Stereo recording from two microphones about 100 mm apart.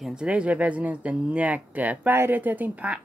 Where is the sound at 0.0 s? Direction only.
10° right (ahead or behind).